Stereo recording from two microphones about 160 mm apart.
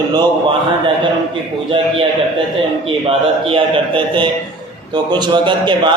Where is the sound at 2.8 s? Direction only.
35° right (ahead or behind).